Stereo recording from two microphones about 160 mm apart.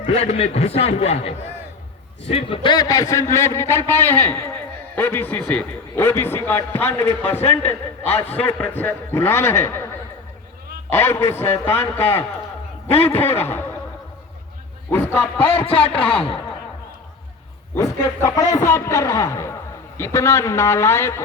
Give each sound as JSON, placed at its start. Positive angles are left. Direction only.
{"t": 0.1, "sound": "a man's voice", "side_deg": 40}
{"t": 10.8, "sound": "a man's voice", "side_deg": 15}
{"t": 13.2, "sound": "a man's voice", "side_deg": 15}
{"t": 14.8, "sound": "a man's voice", "side_deg": 15}
{"t": 15.5, "sound": "a man's voice", "side_deg": 35}
{"t": 17.7, "sound": "a man's voice", "side_deg": 15}